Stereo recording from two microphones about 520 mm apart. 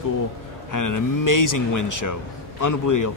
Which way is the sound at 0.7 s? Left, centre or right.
Left.